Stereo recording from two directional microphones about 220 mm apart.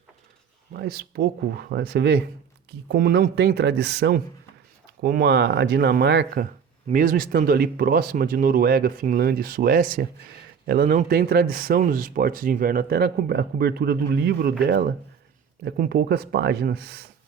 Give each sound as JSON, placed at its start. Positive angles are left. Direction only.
{"t": 0.7, "sound": "speech", "side_deg": -45}